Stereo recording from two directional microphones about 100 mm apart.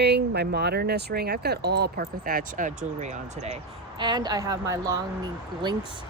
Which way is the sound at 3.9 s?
50° right (ahead or behind).